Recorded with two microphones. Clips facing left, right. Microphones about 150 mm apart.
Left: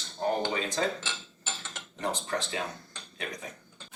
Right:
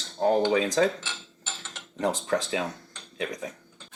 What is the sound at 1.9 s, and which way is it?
Speech, 90° right.